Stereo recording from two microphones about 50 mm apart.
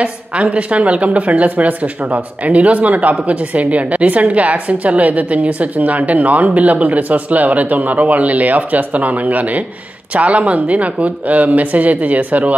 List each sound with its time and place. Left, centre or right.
0.0 s a woman's voice: right